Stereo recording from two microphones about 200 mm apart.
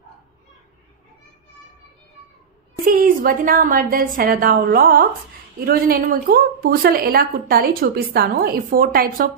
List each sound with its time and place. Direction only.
2.8 s a woman's voice: 45° right (ahead or behind)